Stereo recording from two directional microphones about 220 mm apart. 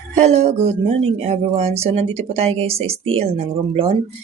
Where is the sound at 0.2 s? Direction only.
30° right (ahead or behind).